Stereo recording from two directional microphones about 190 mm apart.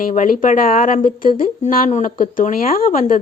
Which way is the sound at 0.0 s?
45° left (ahead or behind).